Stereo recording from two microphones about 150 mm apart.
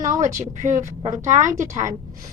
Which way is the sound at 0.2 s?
55° right (ahead or behind).